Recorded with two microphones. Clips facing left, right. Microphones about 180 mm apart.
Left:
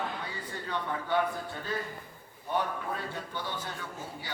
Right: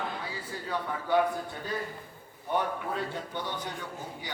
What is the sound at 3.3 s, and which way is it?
Speech, 15° right (ahead or behind).